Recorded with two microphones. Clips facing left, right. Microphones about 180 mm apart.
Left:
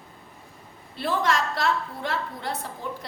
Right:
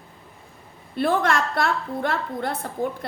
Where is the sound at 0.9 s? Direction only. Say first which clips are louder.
Right 4 dB; 55° right (ahead or behind).